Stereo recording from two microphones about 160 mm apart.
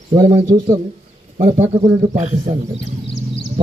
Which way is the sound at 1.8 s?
25° right (ahead or behind).